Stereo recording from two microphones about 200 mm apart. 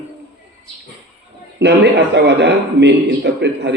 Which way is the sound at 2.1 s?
60° right (ahead or behind).